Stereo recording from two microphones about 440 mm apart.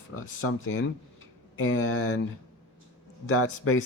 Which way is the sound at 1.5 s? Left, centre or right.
Left.